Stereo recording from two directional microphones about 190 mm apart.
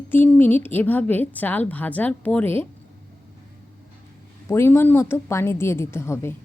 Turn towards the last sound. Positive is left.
turn(degrees=15)  # may be behind; listen again after turning